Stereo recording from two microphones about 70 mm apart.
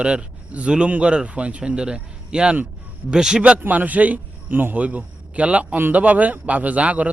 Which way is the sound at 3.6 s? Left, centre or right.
Right.